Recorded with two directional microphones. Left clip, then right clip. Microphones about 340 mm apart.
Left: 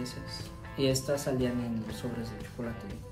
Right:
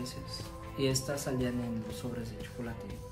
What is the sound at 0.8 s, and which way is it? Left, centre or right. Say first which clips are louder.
Speech: left 4 dB; centre.